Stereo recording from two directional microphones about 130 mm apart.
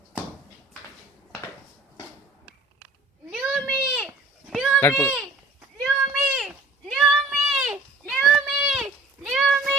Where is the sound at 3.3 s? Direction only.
5° left (ahead or behind).